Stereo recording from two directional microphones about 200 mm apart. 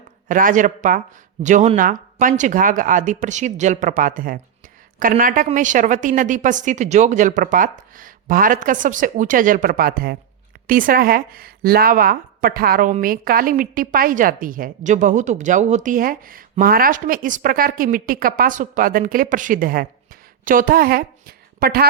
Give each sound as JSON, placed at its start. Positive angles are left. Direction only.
{"t": 0.3, "sound": "a woman's voice", "side_deg": -40}